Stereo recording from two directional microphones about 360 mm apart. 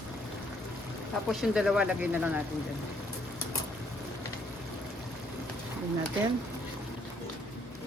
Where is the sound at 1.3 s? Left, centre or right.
Centre.